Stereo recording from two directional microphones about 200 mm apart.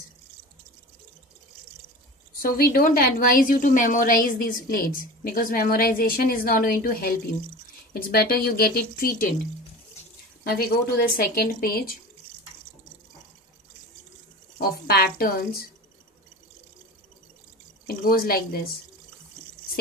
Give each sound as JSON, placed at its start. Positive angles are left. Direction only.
{"t": 2.4, "sound": "a woman's voice", "side_deg": 50}
{"t": 10.4, "sound": "a woman's voice", "side_deg": 45}
{"t": 14.6, "sound": "a woman's voice", "side_deg": 50}
{"t": 18.0, "sound": "a woman's voice", "side_deg": 50}